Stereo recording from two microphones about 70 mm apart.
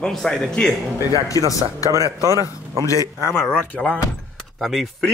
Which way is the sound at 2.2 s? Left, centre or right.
Right.